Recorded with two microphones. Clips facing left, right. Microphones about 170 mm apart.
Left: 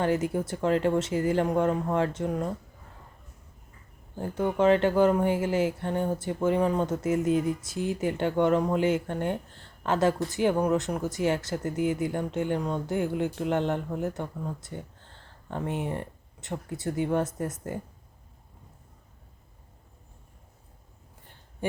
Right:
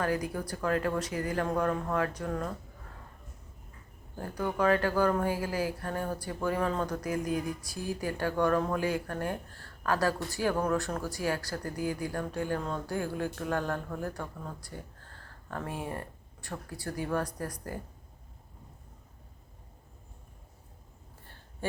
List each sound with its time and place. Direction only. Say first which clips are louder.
0.0 s speech: left 5 dB; 25° left (ahead or behind)
4.2 s speech: left 5 dB; 25° left (ahead or behind)
21.6 s a sound: left 3 dB; 20° left (ahead or behind)